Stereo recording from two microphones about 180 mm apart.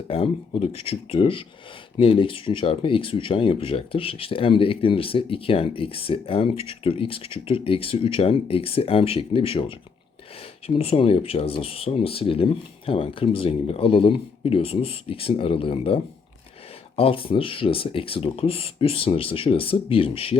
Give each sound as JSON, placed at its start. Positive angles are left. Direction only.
{"t": 0.1, "sound": "speech", "side_deg": 35}
{"t": 10.8, "sound": "speech", "side_deg": 35}